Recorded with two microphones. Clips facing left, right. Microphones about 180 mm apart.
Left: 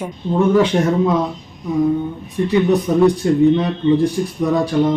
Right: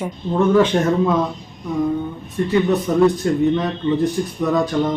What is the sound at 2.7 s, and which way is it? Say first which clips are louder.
Speech: left 2 dB; 10° left (ahead or behind).